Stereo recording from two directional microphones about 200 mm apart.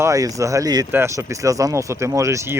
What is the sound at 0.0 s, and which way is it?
Speech, 15° right (ahead or behind).